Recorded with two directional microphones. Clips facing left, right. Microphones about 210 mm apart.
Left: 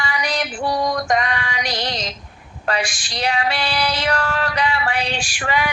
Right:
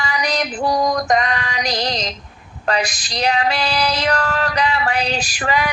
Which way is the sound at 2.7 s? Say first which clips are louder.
Right 2 dB; 40° right (ahead or behind).